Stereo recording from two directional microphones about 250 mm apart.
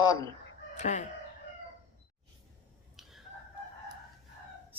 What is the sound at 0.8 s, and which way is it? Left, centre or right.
Chicken, left.